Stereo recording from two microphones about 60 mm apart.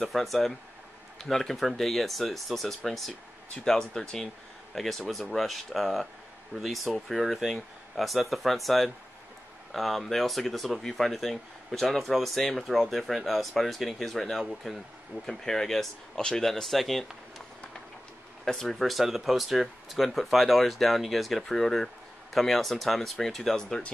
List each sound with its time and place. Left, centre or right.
0.0 s speech: centre
18.4 s speech: centre